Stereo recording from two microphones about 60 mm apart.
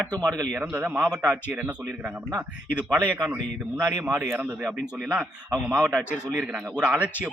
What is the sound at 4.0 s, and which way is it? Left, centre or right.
Speech, right.